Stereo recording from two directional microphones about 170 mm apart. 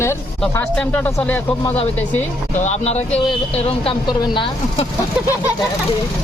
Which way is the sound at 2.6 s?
40° left (ahead or behind).